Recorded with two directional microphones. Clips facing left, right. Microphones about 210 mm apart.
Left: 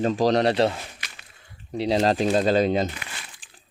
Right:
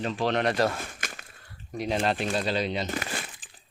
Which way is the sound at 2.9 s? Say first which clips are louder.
Right 8 dB; 45° right (ahead or behind).